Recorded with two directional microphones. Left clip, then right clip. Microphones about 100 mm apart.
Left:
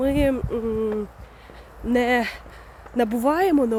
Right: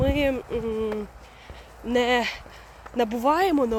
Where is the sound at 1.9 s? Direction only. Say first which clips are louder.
Left 1 dB; 55° left (ahead or behind).